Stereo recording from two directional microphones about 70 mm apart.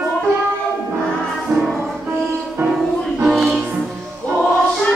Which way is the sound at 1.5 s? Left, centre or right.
Right.